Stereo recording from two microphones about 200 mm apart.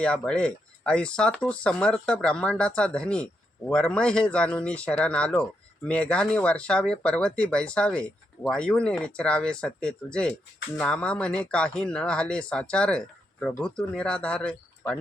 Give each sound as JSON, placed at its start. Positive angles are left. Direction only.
{"t": 0.0, "sound": "speech", "side_deg": 5}